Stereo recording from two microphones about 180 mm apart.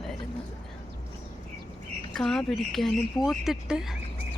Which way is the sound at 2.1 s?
Centre (ahead or behind).